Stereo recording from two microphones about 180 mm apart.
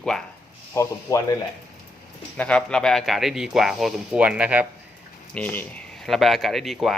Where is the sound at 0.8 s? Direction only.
15° left (ahead or behind).